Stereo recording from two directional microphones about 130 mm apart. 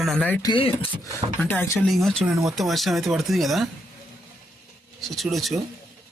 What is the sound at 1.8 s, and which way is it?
Speech, centre (ahead or behind).